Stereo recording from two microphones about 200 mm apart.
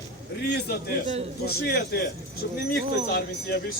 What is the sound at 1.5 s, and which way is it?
Speech, 50° left (ahead or behind).